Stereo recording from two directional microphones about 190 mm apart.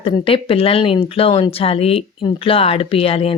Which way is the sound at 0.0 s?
30° left (ahead or behind).